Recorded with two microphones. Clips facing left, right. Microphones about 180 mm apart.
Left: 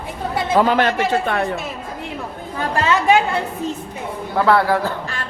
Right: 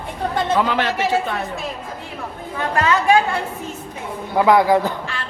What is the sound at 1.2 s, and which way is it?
Speech, 65° left (ahead or behind).